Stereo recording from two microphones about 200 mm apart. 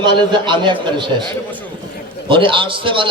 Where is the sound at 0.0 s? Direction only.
25° right (ahead or behind).